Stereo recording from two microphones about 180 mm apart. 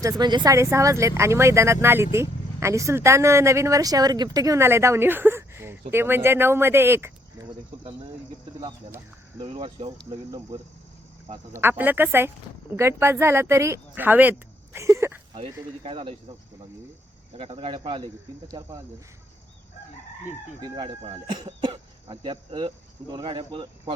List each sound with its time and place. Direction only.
0.0 s speech: 20° right (ahead or behind)
9.4 s speech: 30° right (ahead or behind)
11.3 s speech: 15° right (ahead or behind)
15.8 s speech: 30° right (ahead or behind)
17.3 s speech: 35° right (ahead or behind)
20.7 s speech: 30° right (ahead or behind)